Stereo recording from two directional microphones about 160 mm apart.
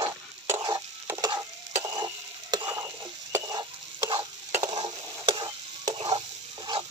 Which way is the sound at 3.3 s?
25° right (ahead or behind).